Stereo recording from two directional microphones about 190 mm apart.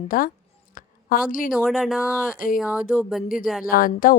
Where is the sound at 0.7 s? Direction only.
45° left (ahead or behind).